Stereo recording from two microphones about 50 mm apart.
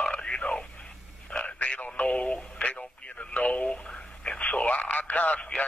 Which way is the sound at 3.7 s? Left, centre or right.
Centre.